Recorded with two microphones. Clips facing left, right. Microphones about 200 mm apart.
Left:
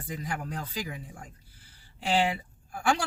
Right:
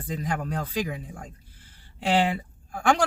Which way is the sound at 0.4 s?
75° right (ahead or behind).